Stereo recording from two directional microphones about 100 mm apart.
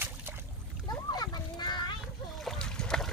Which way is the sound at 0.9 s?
45° left (ahead or behind).